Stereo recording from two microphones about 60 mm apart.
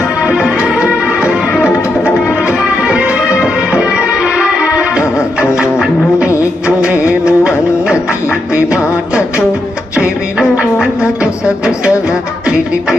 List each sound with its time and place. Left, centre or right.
0.3 s music: centre
2.5 s music: centre
6.7 s music of bollywood: right
7.3 s music: centre